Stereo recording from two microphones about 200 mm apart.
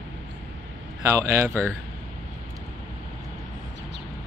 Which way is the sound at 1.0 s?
15° right (ahead or behind).